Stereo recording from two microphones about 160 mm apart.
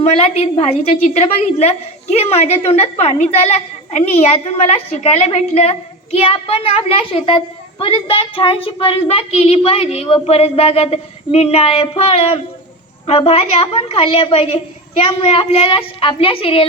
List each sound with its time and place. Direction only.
0.0 s a woman's voice: 40° left (ahead or behind)